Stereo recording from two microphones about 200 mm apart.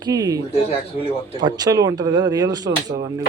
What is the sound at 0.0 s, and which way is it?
Speech, 20° right (ahead or behind).